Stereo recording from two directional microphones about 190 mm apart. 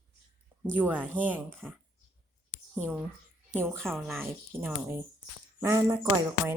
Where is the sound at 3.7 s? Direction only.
5° left (ahead or behind); by 5.8 s 15° right (ahead or behind).